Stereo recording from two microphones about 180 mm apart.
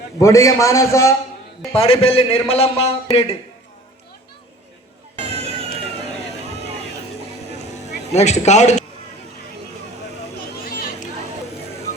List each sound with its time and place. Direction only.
0.2 s a man's voice: 15° left (ahead or behind)
1.7 s a man's voice: 30° left (ahead or behind)
8.1 s a man's voice: 40° left (ahead or behind)
10.7 s a sound: 55° left (ahead or behind)